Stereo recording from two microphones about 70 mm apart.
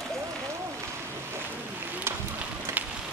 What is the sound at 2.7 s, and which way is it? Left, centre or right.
Rain on surface, right.